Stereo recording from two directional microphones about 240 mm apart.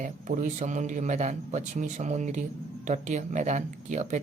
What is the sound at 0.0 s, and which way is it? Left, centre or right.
Speech, right.